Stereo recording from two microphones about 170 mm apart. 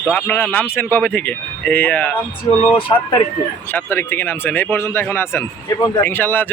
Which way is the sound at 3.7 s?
15° left (ahead or behind).